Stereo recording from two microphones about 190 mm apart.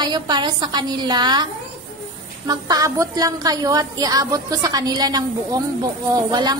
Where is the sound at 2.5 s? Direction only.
20° right (ahead or behind).